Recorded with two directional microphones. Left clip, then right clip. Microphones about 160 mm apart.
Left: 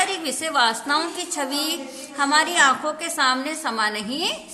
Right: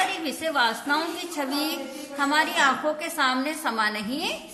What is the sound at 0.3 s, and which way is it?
A woman's voice, 35° left (ahead or behind).